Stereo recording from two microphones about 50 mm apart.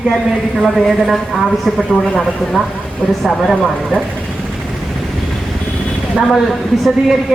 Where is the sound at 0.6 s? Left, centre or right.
Centre.